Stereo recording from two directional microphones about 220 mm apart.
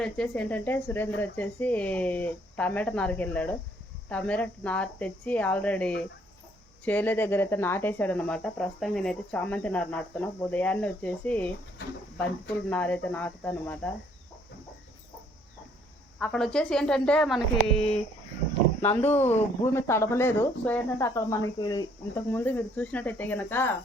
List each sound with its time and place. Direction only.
0.0 s speech: 5° left (ahead or behind)
12.7 s speech: 5° left (ahead or behind)
16.1 s a woman's voice: 5° left (ahead or behind)
17.7 s speech: 25° left (ahead or behind)
19.1 s speech: 10° left (ahead or behind)